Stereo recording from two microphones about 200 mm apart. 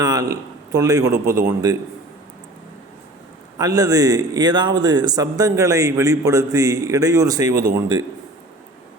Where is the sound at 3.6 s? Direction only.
20° right (ahead or behind).